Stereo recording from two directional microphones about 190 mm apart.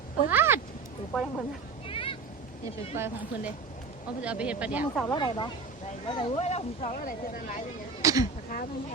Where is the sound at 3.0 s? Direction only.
15° right (ahead or behind).